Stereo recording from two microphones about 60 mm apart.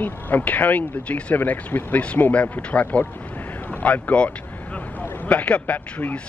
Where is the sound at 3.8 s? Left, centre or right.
Left.